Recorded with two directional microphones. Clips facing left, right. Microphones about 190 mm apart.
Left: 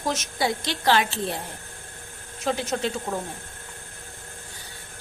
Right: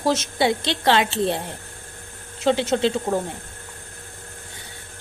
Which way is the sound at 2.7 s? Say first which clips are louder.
Right 7 dB; 30° right (ahead or behind).